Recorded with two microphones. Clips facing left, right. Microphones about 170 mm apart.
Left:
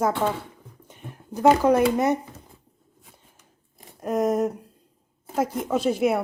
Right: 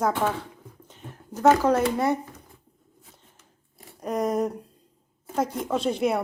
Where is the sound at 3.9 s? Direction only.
5° left (ahead or behind).